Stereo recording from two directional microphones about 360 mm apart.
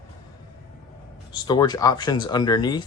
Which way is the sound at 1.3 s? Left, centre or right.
Centre.